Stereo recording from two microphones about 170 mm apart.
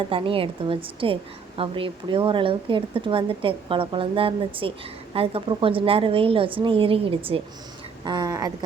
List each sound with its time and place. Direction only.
0.1 s a woman's voice: 30° right (ahead or behind)